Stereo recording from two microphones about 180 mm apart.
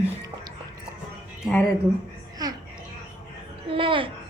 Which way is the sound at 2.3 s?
20° right (ahead or behind).